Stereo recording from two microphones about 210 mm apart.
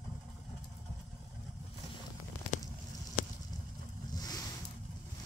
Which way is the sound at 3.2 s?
40° left (ahead or behind).